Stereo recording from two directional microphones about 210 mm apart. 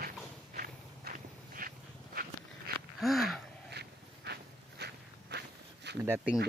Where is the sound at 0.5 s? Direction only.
45° right (ahead or behind).